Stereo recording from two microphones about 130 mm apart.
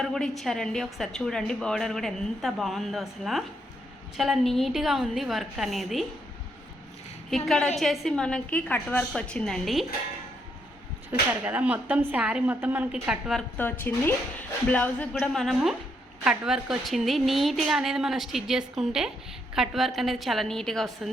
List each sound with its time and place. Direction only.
0.0 s a woman's voice: 5° left (ahead or behind)
7.3 s a woman's voice: centre (ahead or behind)
11.1 s speech: 10° right (ahead or behind)
13.6 s a woman's voice: 15° left (ahead or behind)
15.3 s a woman's voice: centre (ahead or behind)